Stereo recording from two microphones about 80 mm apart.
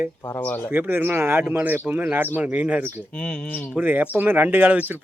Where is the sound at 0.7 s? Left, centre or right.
Right.